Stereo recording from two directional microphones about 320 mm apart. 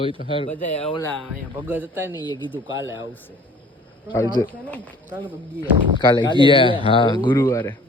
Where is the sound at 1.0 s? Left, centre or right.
Centre.